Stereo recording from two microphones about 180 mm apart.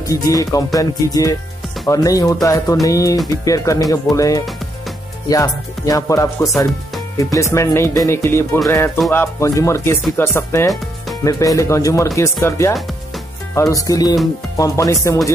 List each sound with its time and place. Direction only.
0.0 s speech: 20° left (ahead or behind)
12.7 s music: centre (ahead or behind)
13.6 s speech: 20° left (ahead or behind)